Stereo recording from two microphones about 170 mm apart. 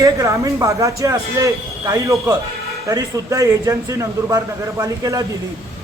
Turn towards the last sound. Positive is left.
turn(degrees=-20)  # may be behind; listen again after turning